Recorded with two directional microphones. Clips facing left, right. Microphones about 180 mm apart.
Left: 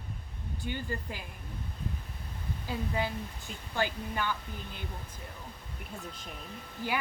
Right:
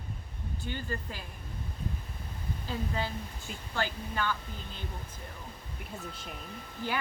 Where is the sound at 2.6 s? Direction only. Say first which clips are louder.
Left 2 dB; 15° left (ahead or behind).